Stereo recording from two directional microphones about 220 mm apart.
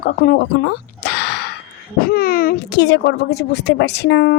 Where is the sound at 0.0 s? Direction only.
45° left (ahead or behind).